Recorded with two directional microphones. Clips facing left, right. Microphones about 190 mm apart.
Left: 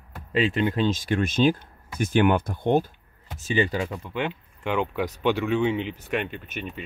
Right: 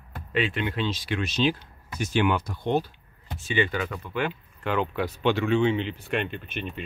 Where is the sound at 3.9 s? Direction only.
20° left (ahead or behind).